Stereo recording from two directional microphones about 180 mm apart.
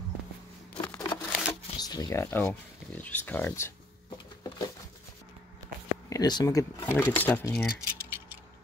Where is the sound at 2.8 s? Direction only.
10° left (ahead or behind).